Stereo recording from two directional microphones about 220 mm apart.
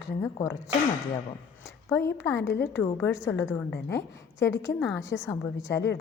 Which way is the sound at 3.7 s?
50° left (ahead or behind).